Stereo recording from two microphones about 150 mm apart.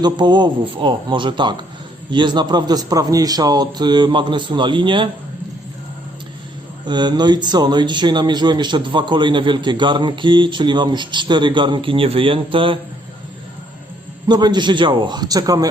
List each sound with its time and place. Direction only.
0.0 s a man's voice: 30° right (ahead or behind)
6.8 s a man's voice: 30° right (ahead or behind)
14.3 s a man's voice: 30° right (ahead or behind)